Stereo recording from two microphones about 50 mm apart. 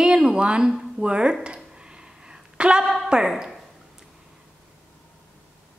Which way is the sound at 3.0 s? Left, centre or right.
Centre.